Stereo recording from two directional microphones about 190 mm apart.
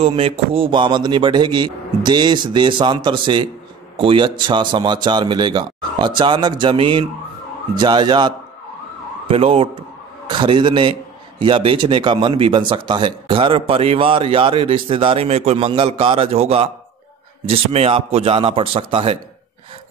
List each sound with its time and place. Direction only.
0.0 s speech: 30° right (ahead or behind)